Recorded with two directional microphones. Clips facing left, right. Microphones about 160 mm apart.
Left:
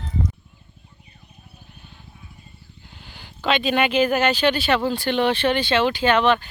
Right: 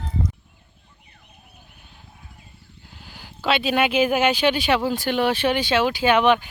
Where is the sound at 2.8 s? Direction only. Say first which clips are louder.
Right 1 dB; centre (ahead or behind).